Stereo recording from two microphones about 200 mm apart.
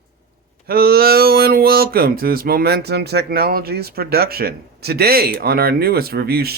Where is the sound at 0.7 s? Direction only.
50° right (ahead or behind).